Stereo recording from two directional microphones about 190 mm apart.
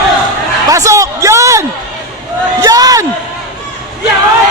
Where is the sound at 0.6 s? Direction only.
15° right (ahead or behind).